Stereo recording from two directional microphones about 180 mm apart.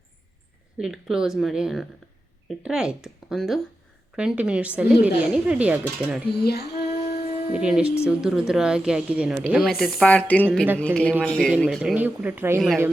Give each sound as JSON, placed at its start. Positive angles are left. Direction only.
{"t": 0.8, "sound": "speech", "side_deg": -5}
{"t": 6.3, "sound": "speech", "side_deg": 60}
{"t": 7.5, "sound": "a man's voice", "side_deg": -5}
{"t": 11.8, "sound": "speech", "side_deg": -5}